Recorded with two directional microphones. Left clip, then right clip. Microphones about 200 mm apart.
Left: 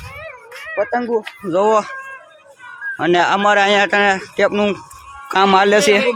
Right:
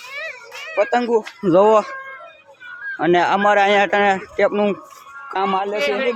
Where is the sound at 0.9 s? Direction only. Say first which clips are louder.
Right 1 dB; 5° right (ahead or behind).